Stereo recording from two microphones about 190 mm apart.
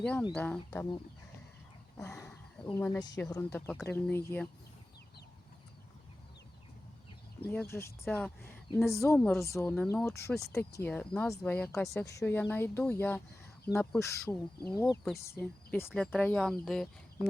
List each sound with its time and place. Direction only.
0.0 s speech: 5° left (ahead or behind)
2.0 s speech: 15° left (ahead or behind)
7.4 s speech: 10° left (ahead or behind)